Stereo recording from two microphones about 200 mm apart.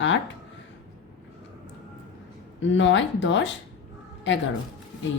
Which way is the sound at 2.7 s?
65° left (ahead or behind).